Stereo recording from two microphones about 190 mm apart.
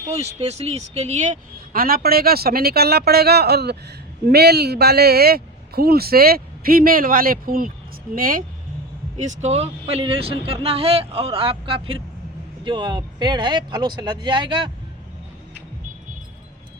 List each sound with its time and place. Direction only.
0.3 s a woman's voice: 35° right (ahead or behind)
9.1 s speech: 35° right (ahead or behind)